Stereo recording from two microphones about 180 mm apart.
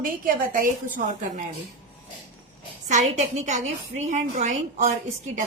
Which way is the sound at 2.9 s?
40° right (ahead or behind).